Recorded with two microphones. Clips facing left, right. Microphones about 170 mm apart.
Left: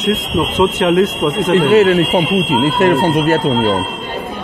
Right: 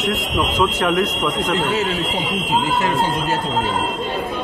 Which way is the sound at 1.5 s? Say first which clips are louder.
Left 11 dB; 65° left (ahead or behind).